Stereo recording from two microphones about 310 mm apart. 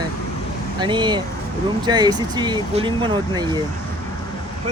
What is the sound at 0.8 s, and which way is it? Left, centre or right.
Speech, centre.